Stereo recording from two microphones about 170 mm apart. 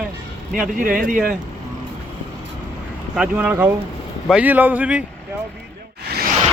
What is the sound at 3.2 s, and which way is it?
Speech, 10° right (ahead or behind).